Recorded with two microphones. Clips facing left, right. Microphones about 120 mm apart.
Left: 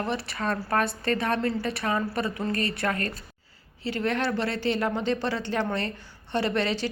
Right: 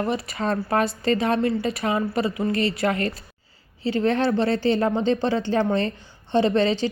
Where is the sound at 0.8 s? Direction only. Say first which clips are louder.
Right 5 dB; 60° left (ahead or behind).